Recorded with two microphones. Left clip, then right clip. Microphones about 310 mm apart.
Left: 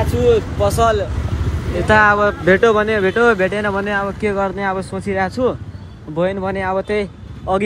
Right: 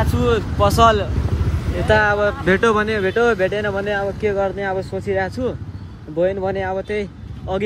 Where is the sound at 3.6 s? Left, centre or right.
Left.